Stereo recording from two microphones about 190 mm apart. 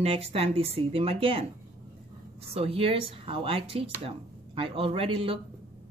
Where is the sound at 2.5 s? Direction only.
30° right (ahead or behind).